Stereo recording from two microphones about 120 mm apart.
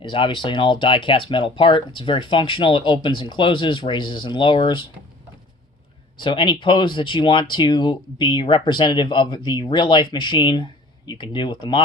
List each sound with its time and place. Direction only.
0.0 s speech: 45° left (ahead or behind)
6.1 s speech: 45° left (ahead or behind)